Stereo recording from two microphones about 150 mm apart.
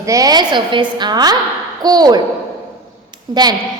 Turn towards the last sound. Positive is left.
turn(degrees=-25)  # may be behind; listen again after turning